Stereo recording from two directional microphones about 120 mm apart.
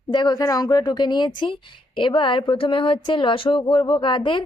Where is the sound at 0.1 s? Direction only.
35° left (ahead or behind).